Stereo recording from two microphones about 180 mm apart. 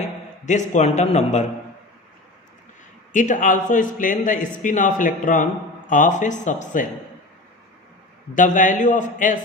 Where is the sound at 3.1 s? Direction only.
45° left (ahead or behind).